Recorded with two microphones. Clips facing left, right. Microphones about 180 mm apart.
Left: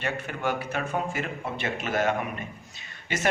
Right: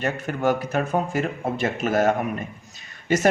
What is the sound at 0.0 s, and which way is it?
Speech, 45° right (ahead or behind).